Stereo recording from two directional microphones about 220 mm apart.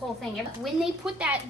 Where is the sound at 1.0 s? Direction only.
5° right (ahead or behind).